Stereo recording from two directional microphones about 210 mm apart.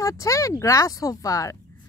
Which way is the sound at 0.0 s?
15° left (ahead or behind).